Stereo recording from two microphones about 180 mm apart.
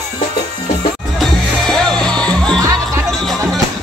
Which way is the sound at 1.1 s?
Centre (ahead or behind).